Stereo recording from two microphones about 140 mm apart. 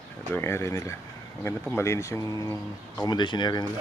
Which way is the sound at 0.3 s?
20° left (ahead or behind).